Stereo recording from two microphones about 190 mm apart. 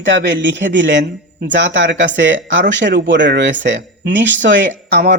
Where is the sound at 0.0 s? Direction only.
70° right (ahead or behind).